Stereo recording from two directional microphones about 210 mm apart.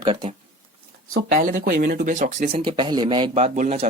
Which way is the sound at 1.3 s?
40° right (ahead or behind).